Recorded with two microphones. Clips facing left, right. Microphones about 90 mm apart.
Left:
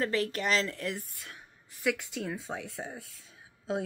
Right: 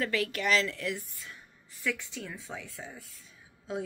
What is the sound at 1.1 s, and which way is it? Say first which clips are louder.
Speech: even; 65° left (ahead or behind).